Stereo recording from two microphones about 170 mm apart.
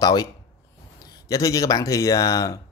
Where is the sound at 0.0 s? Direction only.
20° left (ahead or behind).